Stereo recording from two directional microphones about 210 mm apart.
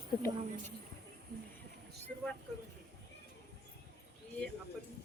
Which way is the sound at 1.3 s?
50° right (ahead or behind).